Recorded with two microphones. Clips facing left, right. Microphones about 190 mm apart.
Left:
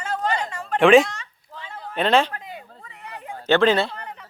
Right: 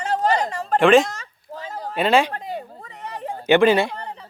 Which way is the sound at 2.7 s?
35° right (ahead or behind).